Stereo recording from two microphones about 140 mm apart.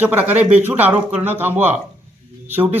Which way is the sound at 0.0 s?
10° right (ahead or behind).